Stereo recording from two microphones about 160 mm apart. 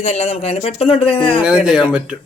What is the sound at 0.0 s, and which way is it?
Speech, 45° left (ahead or behind).